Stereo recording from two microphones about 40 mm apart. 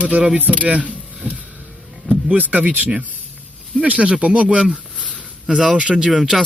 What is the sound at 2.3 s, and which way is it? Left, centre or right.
Speech, right.